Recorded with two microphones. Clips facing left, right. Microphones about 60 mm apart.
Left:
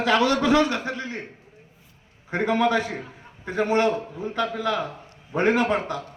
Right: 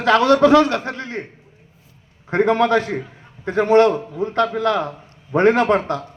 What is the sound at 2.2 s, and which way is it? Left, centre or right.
A man's voice, right.